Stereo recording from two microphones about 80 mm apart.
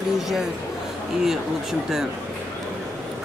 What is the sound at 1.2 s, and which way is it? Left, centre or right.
Speech, centre.